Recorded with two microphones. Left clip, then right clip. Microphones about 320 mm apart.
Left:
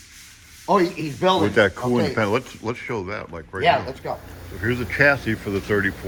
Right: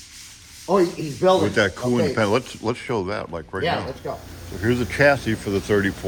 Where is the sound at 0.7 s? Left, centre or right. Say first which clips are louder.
Even; centre.